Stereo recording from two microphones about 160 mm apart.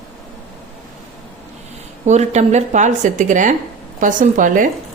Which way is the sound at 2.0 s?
45° right (ahead or behind).